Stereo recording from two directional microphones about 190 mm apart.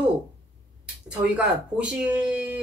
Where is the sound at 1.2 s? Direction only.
5° right (ahead or behind).